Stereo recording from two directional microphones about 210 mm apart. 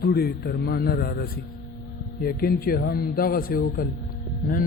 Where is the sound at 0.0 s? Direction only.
50° left (ahead or behind).